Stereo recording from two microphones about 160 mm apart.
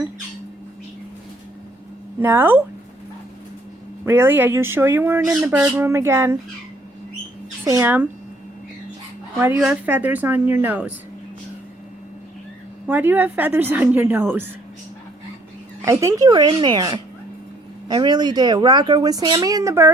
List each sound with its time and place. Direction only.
2.2 s speech: 15° right (ahead or behind)
4.0 s speech: 15° right (ahead or behind)
5.8 s speech: 15° right (ahead or behind)
7.6 s speech: 15° right (ahead or behind)
9.4 s speech: 15° right (ahead or behind)
12.9 s speech: 10° right (ahead or behind)
15.8 s speech: 20° right (ahead or behind)